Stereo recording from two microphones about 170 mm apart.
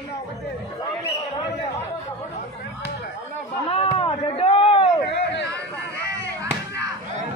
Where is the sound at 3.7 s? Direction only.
35° left (ahead or behind).